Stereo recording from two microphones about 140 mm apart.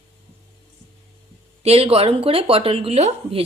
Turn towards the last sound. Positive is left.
turn(degrees=-45)  # may be behind; listen again after turning